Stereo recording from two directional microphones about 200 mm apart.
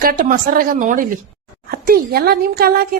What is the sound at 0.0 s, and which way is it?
A woman's voice, 45° right (ahead or behind).